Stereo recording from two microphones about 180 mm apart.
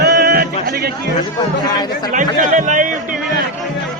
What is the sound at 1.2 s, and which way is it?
Speech, 20° left (ahead or behind).